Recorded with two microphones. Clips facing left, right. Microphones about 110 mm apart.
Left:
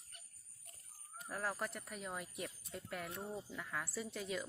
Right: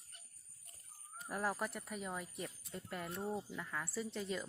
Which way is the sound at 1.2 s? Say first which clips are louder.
Right 3 dB; 10° right (ahead or behind).